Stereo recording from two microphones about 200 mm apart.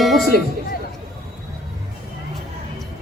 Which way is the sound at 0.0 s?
Centre (ahead or behind).